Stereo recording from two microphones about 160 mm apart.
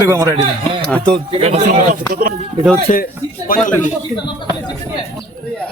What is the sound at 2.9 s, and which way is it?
Speech, 45° left (ahead or behind).